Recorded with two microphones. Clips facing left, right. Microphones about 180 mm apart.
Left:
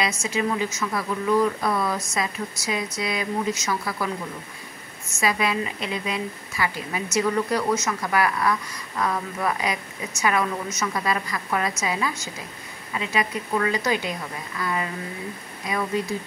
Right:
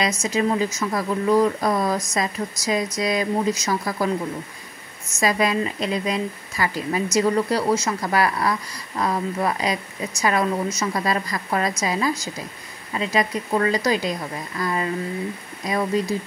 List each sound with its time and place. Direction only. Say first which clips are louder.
0.2 s speech: right 4 dB; 40° right (ahead or behind)
5.2 s speech: right 3 dB; 40° right (ahead or behind)